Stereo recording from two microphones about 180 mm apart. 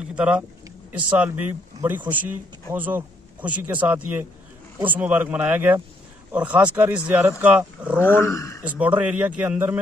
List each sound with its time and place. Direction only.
0.1 s speech: 5° right (ahead or behind)
8.0 s speech: 15° left (ahead or behind)
8.6 s speech: 10° right (ahead or behind)